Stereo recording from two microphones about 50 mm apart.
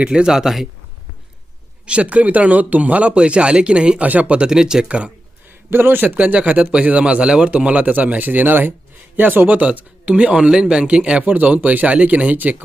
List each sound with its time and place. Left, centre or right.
0.0 s speech: centre
1.9 s speech: right
4.9 s speech: right
5.7 s a man's voice: right